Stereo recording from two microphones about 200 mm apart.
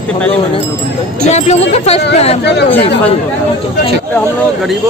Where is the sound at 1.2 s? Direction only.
35° left (ahead or behind).